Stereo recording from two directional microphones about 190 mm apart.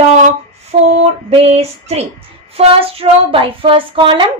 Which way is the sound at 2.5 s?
30° right (ahead or behind).